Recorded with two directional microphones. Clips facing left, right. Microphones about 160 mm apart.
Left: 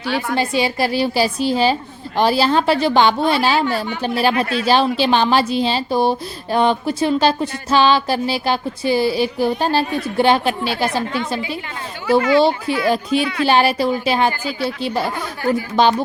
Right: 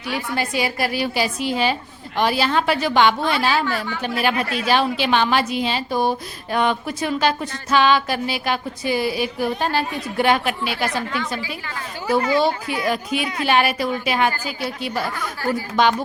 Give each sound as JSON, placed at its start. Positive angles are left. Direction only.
{"t": 0.3, "sound": "a woman's voice", "side_deg": 25}